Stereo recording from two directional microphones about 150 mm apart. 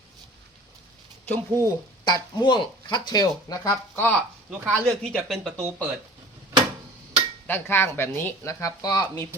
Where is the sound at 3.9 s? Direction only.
10° left (ahead or behind).